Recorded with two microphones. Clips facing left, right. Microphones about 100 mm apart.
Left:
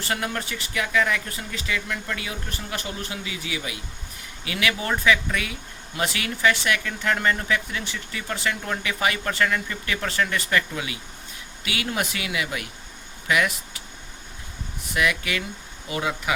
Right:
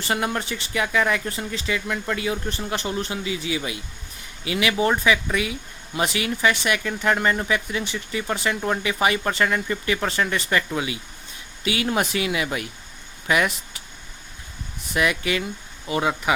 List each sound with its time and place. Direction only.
0.1 s speech: 25° right (ahead or behind)
13.2 s vehicle: 30° right (ahead or behind)
14.9 s speech: 30° right (ahead or behind)